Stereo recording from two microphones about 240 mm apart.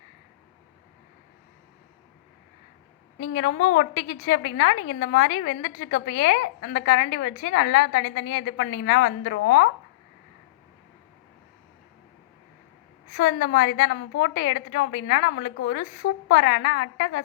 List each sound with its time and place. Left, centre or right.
3.2 s a woman's voice: left
13.1 s a woman's voice: left